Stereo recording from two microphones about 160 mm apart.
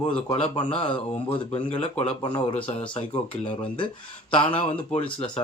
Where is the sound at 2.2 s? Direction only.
30° left (ahead or behind).